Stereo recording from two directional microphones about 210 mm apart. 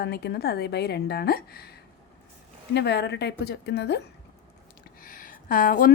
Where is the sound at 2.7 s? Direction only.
55° left (ahead or behind).